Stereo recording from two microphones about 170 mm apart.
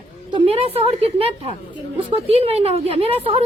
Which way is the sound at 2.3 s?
35° right (ahead or behind).